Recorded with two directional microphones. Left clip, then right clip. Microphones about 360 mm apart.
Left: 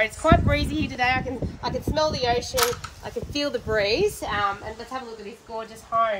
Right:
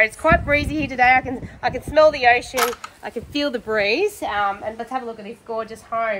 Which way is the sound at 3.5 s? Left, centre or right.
Right.